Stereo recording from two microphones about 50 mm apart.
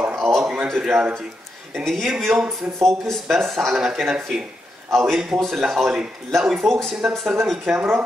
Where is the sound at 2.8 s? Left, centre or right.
Centre.